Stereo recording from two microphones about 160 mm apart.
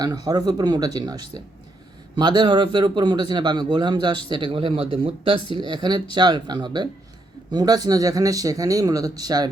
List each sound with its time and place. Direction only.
0.0 s a man's voice: 25° right (ahead or behind)